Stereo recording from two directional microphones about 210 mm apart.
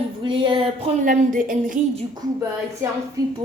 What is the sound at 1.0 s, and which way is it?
Speech, 40° right (ahead or behind).